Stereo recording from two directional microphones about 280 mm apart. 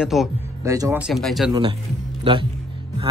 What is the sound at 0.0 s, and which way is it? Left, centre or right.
Speech, centre.